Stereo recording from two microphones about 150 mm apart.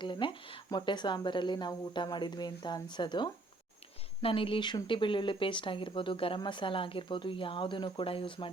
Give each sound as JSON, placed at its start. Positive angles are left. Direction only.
{"t": 0.0, "sound": "speech", "side_deg": 30}